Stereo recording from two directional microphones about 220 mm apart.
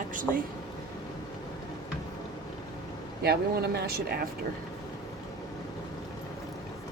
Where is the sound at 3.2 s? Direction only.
45° right (ahead or behind).